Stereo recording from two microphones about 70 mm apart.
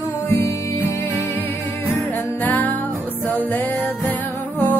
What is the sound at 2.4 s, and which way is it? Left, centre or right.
Music, left.